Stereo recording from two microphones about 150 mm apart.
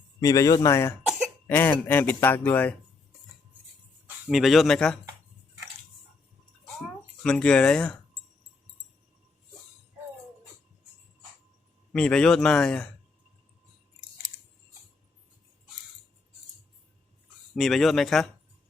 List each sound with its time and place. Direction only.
0.2 s speech: 25° left (ahead or behind)
4.0 s speech: 5° right (ahead or behind)
7.2 s speech: 5° left (ahead or behind)
11.9 s a man's voice: 5° left (ahead or behind)
17.5 s a man's voice: centre (ahead or behind)